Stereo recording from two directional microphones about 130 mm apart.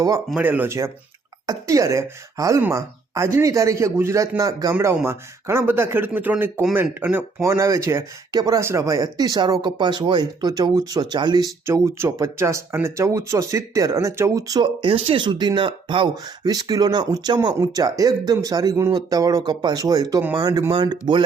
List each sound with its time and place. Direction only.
0.3 s speech: 15° right (ahead or behind)
14.8 s speech: 45° right (ahead or behind)